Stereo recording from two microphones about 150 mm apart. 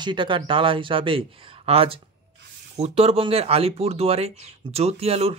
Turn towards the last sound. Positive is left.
turn(degrees=-40)  # may be behind; listen again after turning